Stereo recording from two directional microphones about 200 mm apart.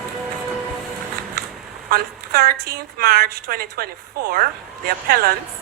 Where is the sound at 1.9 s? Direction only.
50° right (ahead or behind).